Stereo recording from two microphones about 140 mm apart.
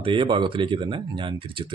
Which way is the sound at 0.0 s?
40° right (ahead or behind).